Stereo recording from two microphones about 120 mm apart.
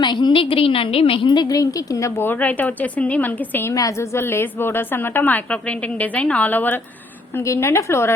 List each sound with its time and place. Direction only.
0.0 s a woman's voice: 40° left (ahead or behind); by 8.1 s 25° left (ahead or behind)